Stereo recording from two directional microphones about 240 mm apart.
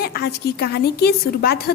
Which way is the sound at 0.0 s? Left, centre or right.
Left.